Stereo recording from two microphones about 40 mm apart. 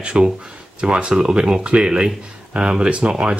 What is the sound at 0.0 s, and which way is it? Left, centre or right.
Speech, right.